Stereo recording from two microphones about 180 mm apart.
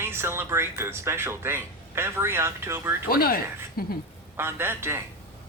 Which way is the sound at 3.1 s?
55° left (ahead or behind).